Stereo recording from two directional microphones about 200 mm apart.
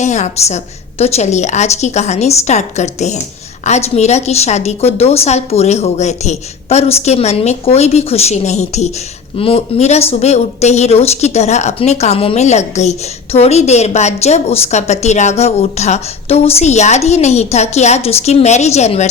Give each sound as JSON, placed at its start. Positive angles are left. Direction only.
{"t": 0.0, "sound": "speech", "side_deg": 35}